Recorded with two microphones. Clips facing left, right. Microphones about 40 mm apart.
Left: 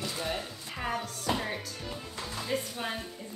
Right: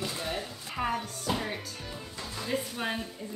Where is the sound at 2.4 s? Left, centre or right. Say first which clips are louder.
Right 2 dB; centre.